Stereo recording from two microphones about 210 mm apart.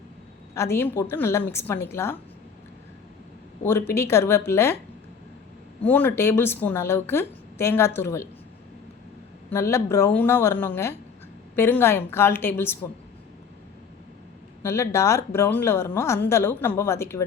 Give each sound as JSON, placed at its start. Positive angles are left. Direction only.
{"t": 0.5, "sound": "a woman's voice", "side_deg": 15}
{"t": 3.6, "sound": "a woman's voice", "side_deg": 10}
{"t": 5.8, "sound": "a woman's voice", "side_deg": 5}
{"t": 9.5, "sound": "a woman's voice", "side_deg": 10}
{"t": 14.6, "sound": "a woman's voice", "side_deg": 15}